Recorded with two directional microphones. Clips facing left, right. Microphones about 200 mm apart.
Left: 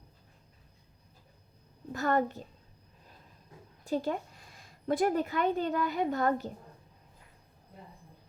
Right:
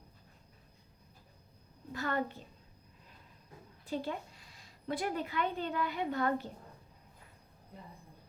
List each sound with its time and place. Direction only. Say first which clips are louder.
1.9 s a child's voice: left 6 dB; 45° left (ahead or behind)
3.8 s a woman's voice: left 6 dB; 45° left (ahead or behind)